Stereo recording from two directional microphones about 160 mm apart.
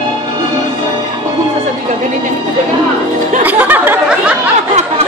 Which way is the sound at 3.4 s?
10° right (ahead or behind).